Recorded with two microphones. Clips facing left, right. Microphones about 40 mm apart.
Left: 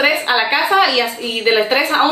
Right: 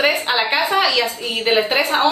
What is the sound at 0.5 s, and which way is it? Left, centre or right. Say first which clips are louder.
Speech: left 4 dB; left.